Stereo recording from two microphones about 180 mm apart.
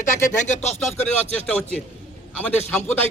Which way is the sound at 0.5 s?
40° left (ahead or behind).